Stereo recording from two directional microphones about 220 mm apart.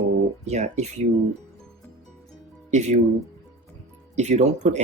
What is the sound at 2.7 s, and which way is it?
Speech, 30° right (ahead or behind).